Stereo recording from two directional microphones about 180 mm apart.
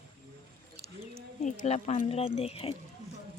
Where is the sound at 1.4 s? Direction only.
40° left (ahead or behind).